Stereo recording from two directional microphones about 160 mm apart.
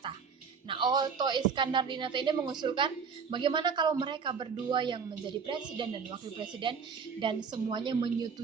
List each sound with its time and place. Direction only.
0.7 s a woman's voice: 30° right (ahead or behind)